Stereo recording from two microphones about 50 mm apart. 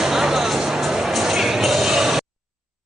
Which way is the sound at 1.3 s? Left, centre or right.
Centre.